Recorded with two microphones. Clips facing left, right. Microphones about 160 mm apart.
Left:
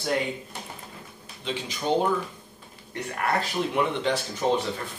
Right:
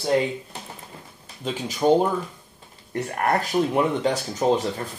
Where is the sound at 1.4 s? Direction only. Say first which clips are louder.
Right 7 dB; 45° right (ahead or behind).